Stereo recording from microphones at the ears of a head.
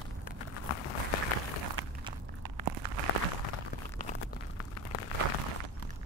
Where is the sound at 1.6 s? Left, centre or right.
Right.